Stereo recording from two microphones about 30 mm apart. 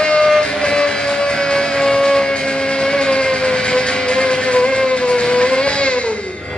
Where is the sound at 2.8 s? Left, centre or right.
Left.